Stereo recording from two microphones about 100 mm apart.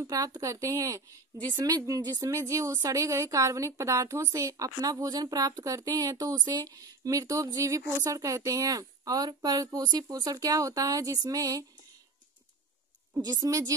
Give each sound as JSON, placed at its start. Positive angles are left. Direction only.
{"t": 0.0, "sound": "a woman's voice", "side_deg": -40}
{"t": 13.2, "sound": "a woman's voice", "side_deg": -40}